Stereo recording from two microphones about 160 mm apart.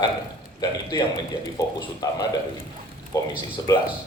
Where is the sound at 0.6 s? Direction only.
25° left (ahead or behind).